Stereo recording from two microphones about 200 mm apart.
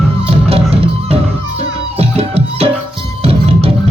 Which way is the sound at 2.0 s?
30° right (ahead or behind).